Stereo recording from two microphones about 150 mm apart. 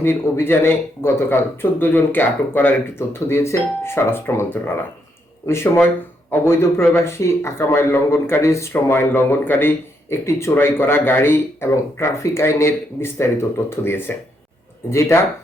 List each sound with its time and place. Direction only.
0.0 s speech: 15° left (ahead or behind)